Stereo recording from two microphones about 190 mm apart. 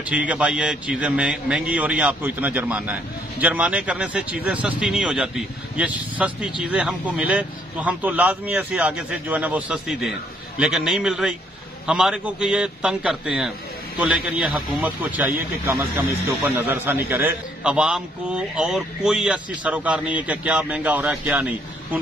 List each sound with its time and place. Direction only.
0.1 s a man's voice: 5° right (ahead or behind)